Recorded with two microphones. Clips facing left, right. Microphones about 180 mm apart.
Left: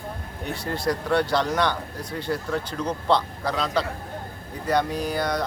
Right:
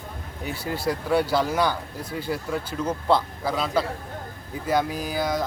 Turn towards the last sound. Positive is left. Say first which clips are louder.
# left 1 dB
turn(degrees=-5)  # may be behind; listen again after turning